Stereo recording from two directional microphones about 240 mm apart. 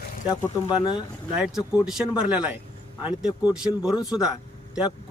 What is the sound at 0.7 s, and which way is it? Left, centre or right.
Speech, centre.